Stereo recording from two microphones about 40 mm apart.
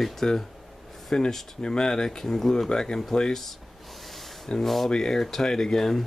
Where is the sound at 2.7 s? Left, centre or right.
Centre.